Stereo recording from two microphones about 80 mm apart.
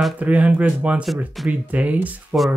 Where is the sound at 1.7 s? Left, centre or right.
Centre.